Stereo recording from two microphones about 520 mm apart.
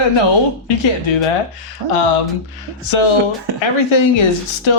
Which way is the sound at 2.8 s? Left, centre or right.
Left.